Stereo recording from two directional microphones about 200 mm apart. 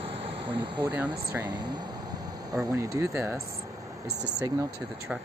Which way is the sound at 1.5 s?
20° right (ahead or behind).